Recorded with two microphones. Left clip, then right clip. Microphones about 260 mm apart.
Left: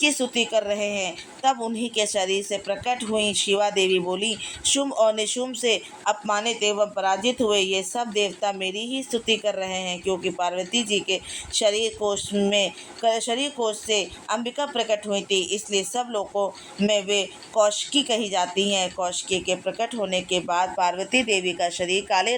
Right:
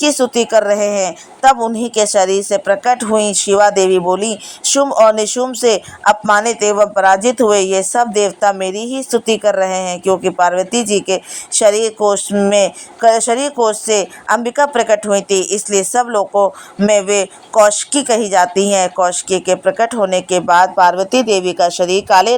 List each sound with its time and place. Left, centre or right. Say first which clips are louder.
0.0 s a woman's voice: right 9 dB; right